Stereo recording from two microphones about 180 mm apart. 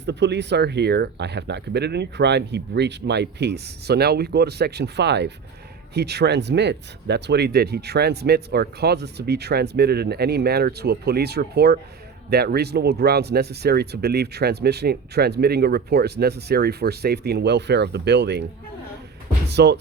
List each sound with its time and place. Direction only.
0.0 s speech: 70° right (ahead or behind)
19.5 s speech: 65° right (ahead or behind)